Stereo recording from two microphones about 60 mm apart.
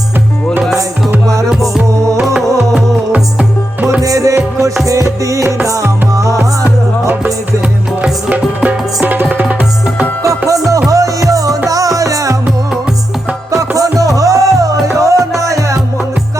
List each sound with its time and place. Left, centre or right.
1.5 s music: centre
3.1 s music: right
4.0 s music: right
7.6 s music: centre
9.3 s tabla: right
10.2 s music: right
13.5 s music: right